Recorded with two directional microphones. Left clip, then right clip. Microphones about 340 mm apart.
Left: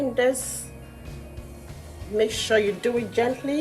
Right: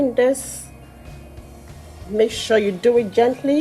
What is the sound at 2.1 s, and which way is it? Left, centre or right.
Speech, right.